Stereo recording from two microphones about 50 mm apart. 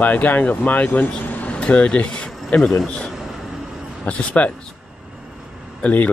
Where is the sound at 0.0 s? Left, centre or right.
Left.